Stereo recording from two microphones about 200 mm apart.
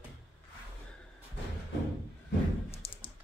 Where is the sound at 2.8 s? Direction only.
30° left (ahead or behind).